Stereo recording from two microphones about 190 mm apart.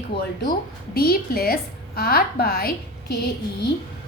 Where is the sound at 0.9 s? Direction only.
55° left (ahead or behind).